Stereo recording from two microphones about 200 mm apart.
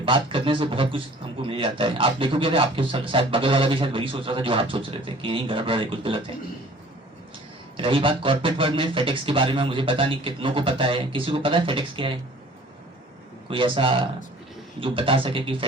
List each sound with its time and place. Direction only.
0.0 s a man's voice: 25° right (ahead or behind)
7.8 s a man's voice: 25° right (ahead or behind)
13.5 s a man's voice: 25° right (ahead or behind)